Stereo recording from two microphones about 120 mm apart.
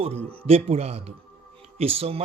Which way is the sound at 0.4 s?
55° right (ahead or behind).